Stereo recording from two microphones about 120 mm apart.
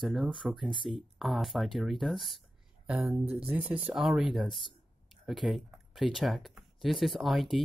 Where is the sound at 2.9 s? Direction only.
20° right (ahead or behind).